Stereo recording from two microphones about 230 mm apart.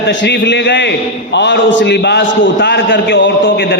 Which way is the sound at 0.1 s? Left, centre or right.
Left.